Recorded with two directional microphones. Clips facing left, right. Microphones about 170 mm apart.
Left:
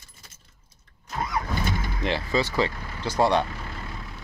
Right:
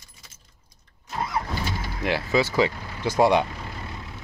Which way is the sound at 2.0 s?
10° right (ahead or behind).